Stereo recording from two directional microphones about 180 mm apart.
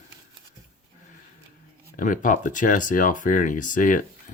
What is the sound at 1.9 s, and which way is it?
Speech, 45° left (ahead or behind).